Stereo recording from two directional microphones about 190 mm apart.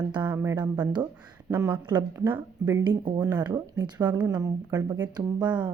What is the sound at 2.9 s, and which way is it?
Speech, 25° right (ahead or behind).